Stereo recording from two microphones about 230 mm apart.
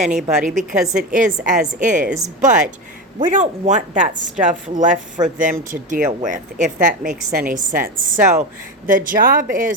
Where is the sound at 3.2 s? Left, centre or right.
Right.